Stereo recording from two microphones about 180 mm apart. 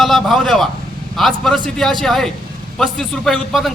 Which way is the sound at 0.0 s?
Centre (ahead or behind).